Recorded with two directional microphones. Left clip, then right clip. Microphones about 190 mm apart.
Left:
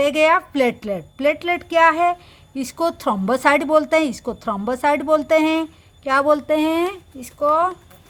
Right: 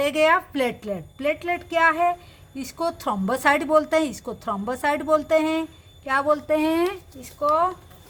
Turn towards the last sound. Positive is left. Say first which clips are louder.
# left 3 dB
turn(degrees=30)  # may be behind; listen again after turning